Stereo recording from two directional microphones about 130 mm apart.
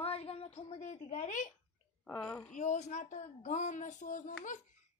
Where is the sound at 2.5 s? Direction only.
65° left (ahead or behind).